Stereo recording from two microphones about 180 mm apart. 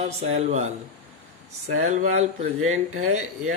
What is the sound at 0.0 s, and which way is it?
Speech, 35° right (ahead or behind).